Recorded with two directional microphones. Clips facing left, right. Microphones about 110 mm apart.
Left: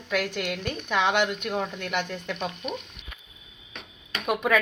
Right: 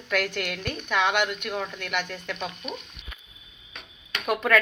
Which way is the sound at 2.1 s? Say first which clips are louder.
Left 2 dB; 15° left (ahead or behind).